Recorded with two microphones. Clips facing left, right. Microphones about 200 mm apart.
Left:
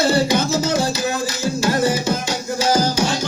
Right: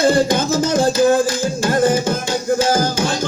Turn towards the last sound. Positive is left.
turn(degrees=-50)  # may be behind; listen again after turning